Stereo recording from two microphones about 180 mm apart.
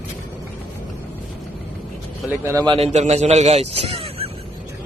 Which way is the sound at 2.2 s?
15° right (ahead or behind).